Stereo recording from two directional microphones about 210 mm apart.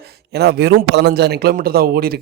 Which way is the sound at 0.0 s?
50° right (ahead or behind).